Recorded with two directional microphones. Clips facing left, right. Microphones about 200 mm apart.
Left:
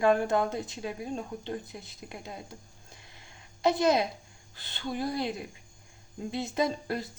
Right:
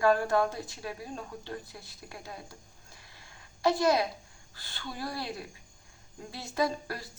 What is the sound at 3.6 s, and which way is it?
A woman's voice, 20° left (ahead or behind).